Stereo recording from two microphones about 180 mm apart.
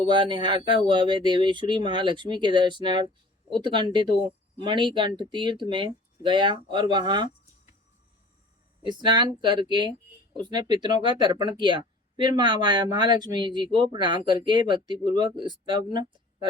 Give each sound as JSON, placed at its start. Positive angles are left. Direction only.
{"t": 0.0, "sound": "speech", "side_deg": -25}
{"t": 8.9, "sound": "speech", "side_deg": -25}